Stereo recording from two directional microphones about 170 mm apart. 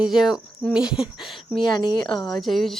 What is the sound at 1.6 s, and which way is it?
Speech, 25° left (ahead or behind).